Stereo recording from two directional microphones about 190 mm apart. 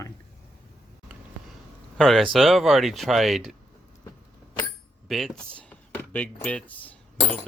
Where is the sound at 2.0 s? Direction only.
Centre (ahead or behind).